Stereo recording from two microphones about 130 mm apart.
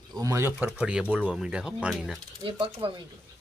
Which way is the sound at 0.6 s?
10° right (ahead or behind).